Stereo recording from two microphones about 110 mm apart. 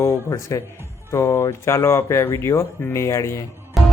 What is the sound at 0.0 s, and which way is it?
Speech, 30° left (ahead or behind).